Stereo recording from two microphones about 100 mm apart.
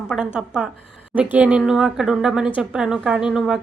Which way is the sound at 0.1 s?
5° right (ahead or behind).